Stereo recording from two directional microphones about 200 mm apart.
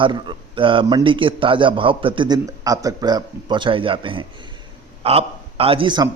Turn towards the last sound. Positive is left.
turn(degrees=-20)  # may be behind; listen again after turning